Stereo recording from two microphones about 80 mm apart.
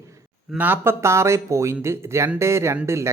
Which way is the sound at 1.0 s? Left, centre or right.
Right.